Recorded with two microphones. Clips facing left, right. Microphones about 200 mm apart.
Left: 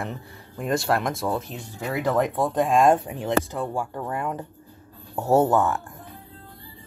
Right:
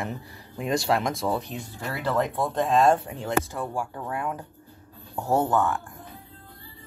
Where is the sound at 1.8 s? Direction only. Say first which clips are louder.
Left 4 dB; 15° left (ahead or behind).